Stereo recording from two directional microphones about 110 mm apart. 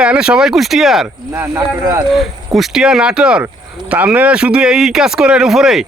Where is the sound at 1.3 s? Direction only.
20° right (ahead or behind).